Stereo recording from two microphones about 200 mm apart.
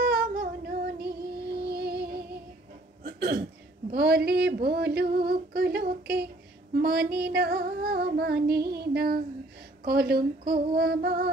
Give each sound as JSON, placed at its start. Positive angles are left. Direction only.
{"t": 0.0, "sound": "music", "side_deg": -50}
{"t": 3.0, "sound": "hiccup", "side_deg": -50}
{"t": 3.9, "sound": "a sound", "side_deg": -50}